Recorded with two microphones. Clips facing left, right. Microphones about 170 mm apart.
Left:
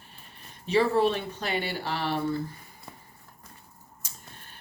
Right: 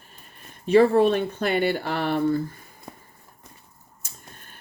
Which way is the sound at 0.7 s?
50° right (ahead or behind).